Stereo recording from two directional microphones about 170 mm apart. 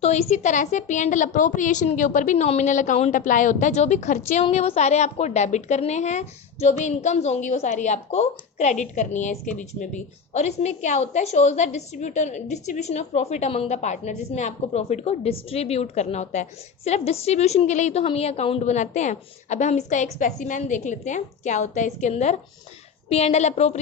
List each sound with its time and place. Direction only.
0.0 s a woman's voice: 40° left (ahead or behind)